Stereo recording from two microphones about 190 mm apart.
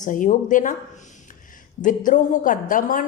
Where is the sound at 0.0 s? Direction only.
40° left (ahead or behind).